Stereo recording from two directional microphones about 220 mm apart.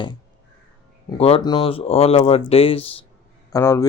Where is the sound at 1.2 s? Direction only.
25° left (ahead or behind).